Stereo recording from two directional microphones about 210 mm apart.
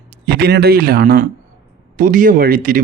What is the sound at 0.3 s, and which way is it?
Speech, 50° right (ahead or behind).